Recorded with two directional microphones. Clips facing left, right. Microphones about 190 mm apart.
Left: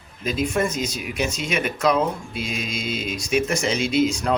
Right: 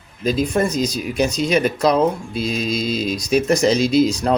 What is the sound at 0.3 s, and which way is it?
Speech, 35° right (ahead or behind).